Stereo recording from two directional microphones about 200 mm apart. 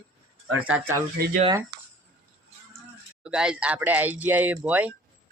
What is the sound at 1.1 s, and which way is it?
Speech, 50° right (ahead or behind).